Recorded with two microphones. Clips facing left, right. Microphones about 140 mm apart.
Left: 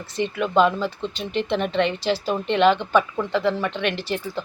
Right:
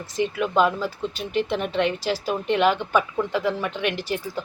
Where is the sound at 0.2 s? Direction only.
5° right (ahead or behind).